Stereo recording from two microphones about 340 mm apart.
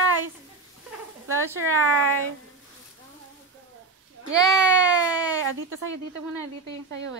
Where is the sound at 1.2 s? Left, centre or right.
Right.